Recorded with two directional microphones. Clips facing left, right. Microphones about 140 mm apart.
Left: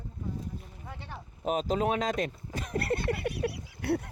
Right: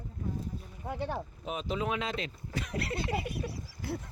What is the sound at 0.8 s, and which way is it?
Speech, 40° right (ahead or behind).